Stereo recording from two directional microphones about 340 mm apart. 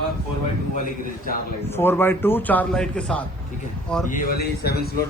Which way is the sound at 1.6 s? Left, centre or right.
Centre.